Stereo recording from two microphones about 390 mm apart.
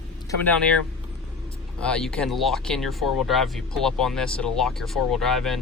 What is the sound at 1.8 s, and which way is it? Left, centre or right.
Speech, centre.